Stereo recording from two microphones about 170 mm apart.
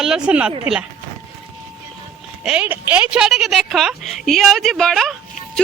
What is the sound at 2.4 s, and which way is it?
Speech, 5° right (ahead or behind).